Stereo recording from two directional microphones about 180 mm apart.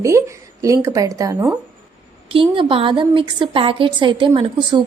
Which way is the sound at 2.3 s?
30° right (ahead or behind).